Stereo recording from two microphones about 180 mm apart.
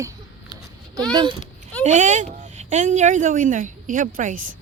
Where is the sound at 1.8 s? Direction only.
40° right (ahead or behind).